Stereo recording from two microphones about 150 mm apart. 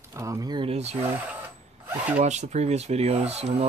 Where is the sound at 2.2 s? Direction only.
50° right (ahead or behind).